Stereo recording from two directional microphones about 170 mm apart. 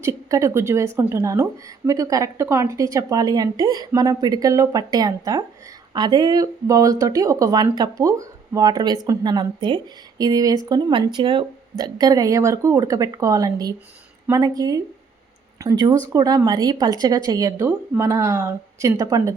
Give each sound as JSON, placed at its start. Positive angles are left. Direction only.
{"t": 0.0, "sound": "a woman's voice", "side_deg": -20}